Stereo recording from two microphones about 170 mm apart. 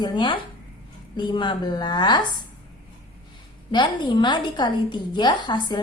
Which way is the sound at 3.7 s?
25° left (ahead or behind).